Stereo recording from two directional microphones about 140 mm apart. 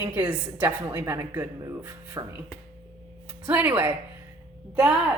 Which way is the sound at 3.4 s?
15° right (ahead or behind).